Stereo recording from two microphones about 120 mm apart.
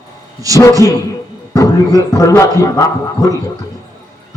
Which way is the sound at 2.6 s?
25° left (ahead or behind).